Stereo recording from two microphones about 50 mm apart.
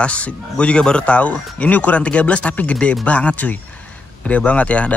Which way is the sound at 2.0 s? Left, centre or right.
Left.